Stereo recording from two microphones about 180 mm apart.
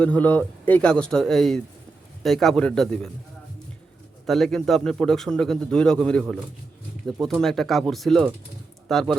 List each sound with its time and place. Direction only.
0.0 s a man's voice: 10° left (ahead or behind)
4.3 s a man's voice: centre (ahead or behind)